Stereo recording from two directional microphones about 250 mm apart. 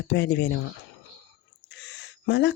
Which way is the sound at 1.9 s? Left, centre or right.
Left.